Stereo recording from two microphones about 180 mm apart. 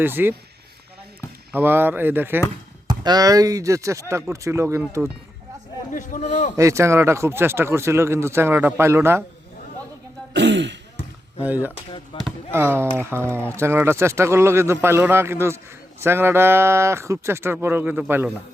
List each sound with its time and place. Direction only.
0.0 s speech: 10° right (ahead or behind)
1.5 s speech: 10° right (ahead or behind)
3.0 s speech: 20° right (ahead or behind)
5.9 s a man's voice: 45° left (ahead or behind)
6.6 s speech: 15° right (ahead or behind)
10.3 s speech: 80° right
11.4 s speech: 10° right (ahead or behind)
12.1 s speech: 30° left (ahead or behind)
12.5 s speech: 15° right (ahead or behind)